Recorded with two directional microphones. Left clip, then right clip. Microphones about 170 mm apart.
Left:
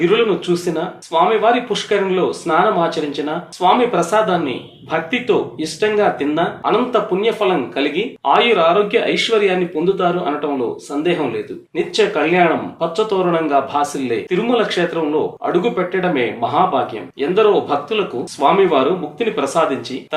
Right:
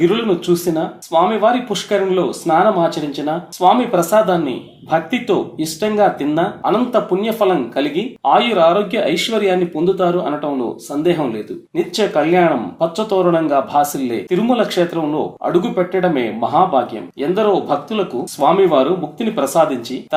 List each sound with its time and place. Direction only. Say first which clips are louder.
0.0 s speech: left 1 dB; 45° right (ahead or behind)
11.8 s speech: even; 45° right (ahead or behind)